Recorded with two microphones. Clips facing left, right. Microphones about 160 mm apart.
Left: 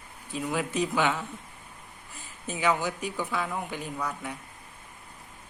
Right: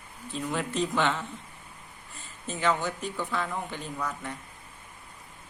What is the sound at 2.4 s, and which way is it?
A man's voice, 10° left (ahead or behind).